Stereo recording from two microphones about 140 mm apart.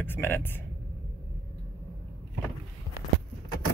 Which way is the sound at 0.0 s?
15° left (ahead or behind).